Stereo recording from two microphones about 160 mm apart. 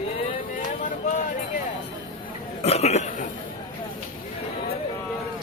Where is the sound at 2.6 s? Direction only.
40° left (ahead or behind).